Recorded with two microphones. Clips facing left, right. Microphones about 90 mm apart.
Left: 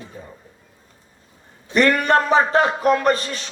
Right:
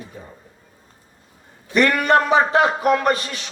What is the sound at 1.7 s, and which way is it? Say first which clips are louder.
Speech: even; 35° left (ahead or behind).